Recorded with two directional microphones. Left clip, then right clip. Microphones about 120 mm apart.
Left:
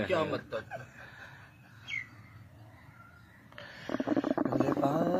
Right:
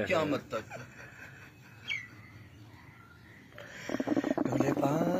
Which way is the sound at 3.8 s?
20° left (ahead or behind).